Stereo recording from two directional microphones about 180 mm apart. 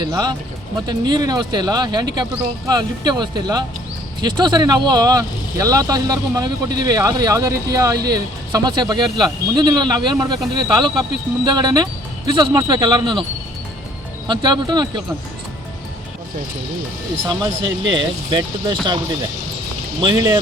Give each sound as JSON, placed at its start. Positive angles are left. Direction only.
{"t": 0.0, "sound": "speech", "side_deg": -20}
{"t": 14.3, "sound": "speech", "side_deg": -25}
{"t": 17.9, "sound": "speech", "side_deg": -25}
{"t": 20.0, "sound": "speech", "side_deg": -20}